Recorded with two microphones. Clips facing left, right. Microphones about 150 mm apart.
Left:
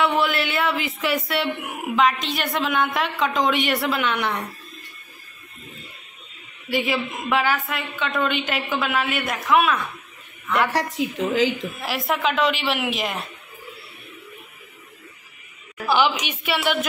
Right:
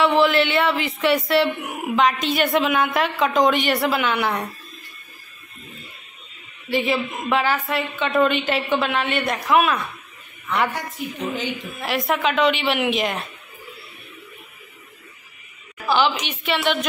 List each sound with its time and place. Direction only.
0.2 s a woman's voice: centre (ahead or behind)
6.7 s a woman's voice: centre (ahead or behind)
10.7 s a woman's voice: 90° left
11.8 s a woman's voice: centre (ahead or behind)
15.9 s a woman's voice: 10° left (ahead or behind)